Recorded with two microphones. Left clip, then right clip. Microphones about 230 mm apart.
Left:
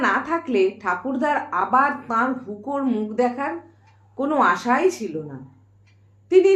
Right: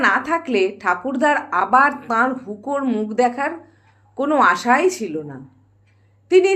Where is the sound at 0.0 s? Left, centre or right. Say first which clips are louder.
Right 4 dB; right.